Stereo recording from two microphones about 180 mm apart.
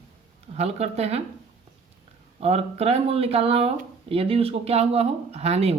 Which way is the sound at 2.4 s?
35° right (ahead or behind).